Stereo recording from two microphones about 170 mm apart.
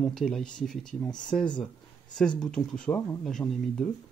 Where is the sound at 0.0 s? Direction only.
Centre (ahead or behind).